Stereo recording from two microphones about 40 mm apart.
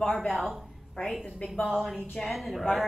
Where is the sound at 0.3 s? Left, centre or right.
Centre.